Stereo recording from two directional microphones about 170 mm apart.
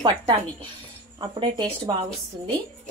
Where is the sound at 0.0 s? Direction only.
25° right (ahead or behind).